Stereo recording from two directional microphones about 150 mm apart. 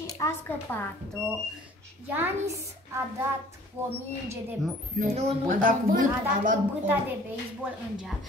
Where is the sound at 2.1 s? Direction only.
15° right (ahead or behind).